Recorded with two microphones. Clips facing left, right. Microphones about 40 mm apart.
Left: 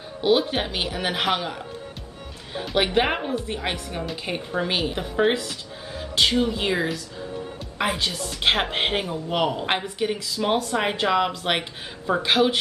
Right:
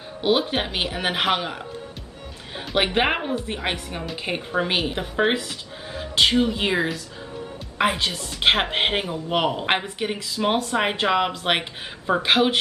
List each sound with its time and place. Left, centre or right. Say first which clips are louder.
0.2 s speech: left 1 dB; centre
2.7 s speech: right 1 dB; right